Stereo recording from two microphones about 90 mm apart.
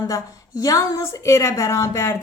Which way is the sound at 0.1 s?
40° left (ahead or behind).